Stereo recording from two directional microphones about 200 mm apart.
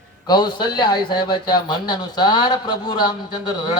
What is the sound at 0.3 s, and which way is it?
Speech, 20° left (ahead or behind).